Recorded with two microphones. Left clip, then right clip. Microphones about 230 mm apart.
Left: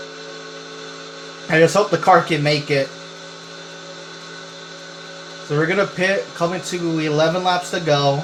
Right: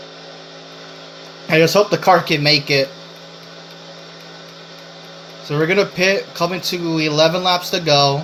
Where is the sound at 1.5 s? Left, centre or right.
Right.